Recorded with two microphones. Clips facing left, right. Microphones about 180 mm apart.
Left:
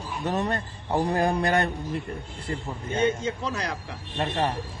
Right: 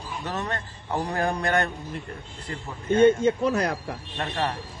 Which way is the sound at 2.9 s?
55° right (ahead or behind).